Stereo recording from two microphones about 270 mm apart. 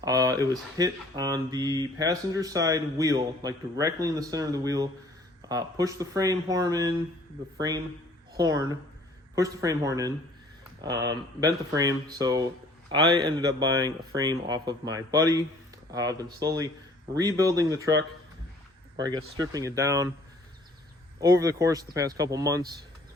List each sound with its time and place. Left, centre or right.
0.0 s speech: centre
8.4 s speech: centre
19.0 s speech: centre
21.2 s speech: centre